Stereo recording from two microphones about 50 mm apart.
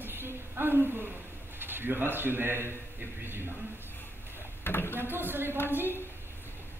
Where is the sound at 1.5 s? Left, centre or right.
Right.